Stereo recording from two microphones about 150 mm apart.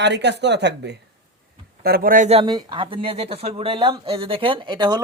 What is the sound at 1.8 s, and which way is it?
Speech, 80° right.